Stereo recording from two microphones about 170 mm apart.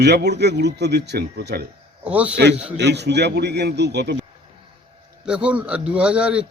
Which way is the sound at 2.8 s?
80° right.